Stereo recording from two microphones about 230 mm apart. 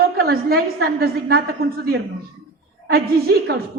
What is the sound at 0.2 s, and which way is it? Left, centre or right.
A woman's voice, right.